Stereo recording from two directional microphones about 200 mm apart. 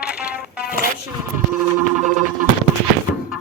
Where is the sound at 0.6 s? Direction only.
45° left (ahead or behind).